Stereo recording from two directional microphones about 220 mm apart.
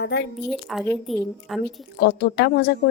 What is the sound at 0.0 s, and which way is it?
Speech, 50° left (ahead or behind).